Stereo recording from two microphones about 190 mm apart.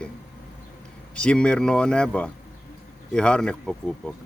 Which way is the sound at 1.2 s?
5° left (ahead or behind).